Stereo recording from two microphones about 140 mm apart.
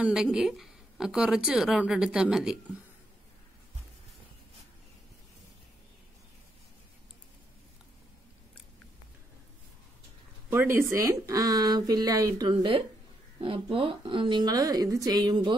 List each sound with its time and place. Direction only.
0.0 s a woman's voice: 5° right (ahead or behind)
10.5 s speech: 15° right (ahead or behind); by 15.5 s 30° right (ahead or behind)